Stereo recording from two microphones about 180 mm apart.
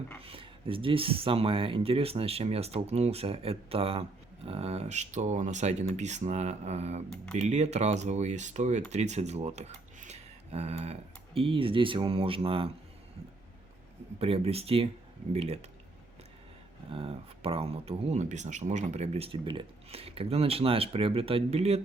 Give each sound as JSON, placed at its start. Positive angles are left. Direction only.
{"t": 0.3, "sound": "speech", "side_deg": -30}
{"t": 14.2, "sound": "speech", "side_deg": -35}
{"t": 16.9, "sound": "speech", "side_deg": -30}